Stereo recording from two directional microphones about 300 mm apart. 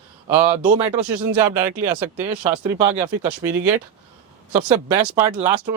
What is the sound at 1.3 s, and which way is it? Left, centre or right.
Speech, centre.